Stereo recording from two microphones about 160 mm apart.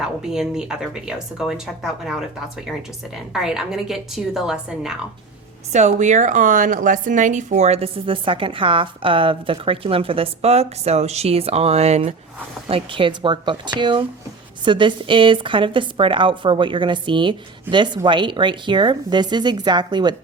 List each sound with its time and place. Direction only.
0.0 s speech: 5° right (ahead or behind)
3.3 s speech: 5° right (ahead or behind)
5.7 s a woman's voice: 45° right (ahead or behind); by 20.1 s 25° right (ahead or behind)